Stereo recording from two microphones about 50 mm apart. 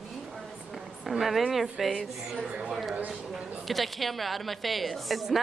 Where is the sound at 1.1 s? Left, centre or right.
Centre.